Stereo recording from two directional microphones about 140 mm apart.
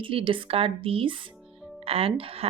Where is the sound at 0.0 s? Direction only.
40° right (ahead or behind).